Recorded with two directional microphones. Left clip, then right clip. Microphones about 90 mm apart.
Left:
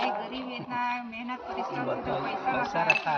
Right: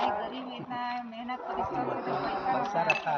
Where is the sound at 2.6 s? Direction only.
30° left (ahead or behind).